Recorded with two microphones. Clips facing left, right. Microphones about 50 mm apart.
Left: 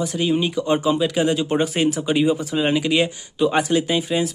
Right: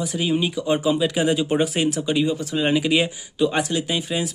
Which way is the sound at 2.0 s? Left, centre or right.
Centre.